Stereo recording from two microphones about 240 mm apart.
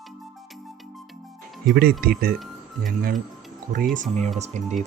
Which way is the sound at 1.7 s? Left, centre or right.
Right.